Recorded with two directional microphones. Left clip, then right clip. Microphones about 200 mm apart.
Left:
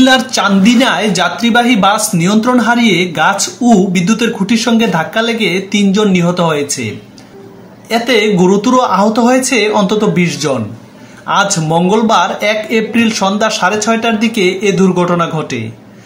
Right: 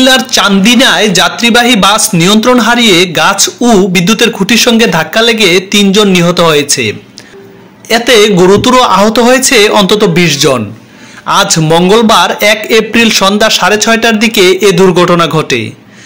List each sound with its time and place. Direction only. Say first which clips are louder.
0.0 s music: right 4 dB; 35° right (ahead or behind)
7.9 s music: right 6 dB; 40° right (ahead or behind)